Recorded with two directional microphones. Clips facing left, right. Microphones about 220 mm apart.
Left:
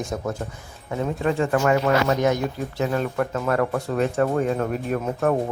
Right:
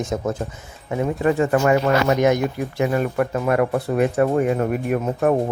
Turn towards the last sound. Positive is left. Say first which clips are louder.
# right 3 dB
turn(degrees=-15)  # may be behind; listen again after turning